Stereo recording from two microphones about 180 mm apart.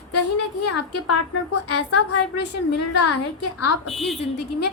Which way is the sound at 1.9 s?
70° left (ahead or behind).